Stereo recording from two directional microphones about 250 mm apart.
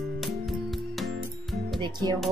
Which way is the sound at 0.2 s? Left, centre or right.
Centre.